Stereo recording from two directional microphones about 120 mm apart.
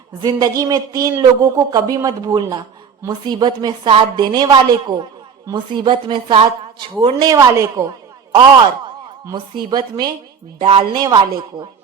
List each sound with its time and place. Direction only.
0.2 s a woman's voice: 35° right (ahead or behind)
9.3 s a woman's voice: 35° right (ahead or behind)
10.6 s speech: 55° right (ahead or behind)
10.9 s a woman's voice: 35° right (ahead or behind)